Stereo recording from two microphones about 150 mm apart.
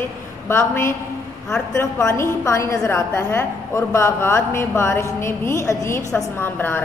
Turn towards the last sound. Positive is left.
turn(degrees=15)  # may be behind; listen again after turning